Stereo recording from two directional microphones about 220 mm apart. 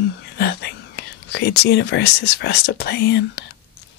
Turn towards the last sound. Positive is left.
turn(degrees=50)  # may be behind; listen again after turning